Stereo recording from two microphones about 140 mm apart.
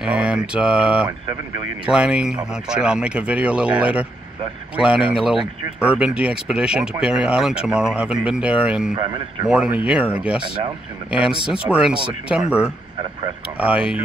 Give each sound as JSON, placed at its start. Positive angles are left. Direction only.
{"t": 0.0, "sound": "mantra", "side_deg": -10}
{"t": 0.6, "sound": "speech", "side_deg": -10}
{"t": 8.9, "sound": "speech", "side_deg": -35}
{"t": 9.5, "sound": "speech", "side_deg": -10}
{"t": 11.4, "sound": "speech", "side_deg": -10}